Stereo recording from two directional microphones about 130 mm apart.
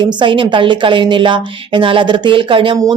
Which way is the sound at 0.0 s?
40° right (ahead or behind).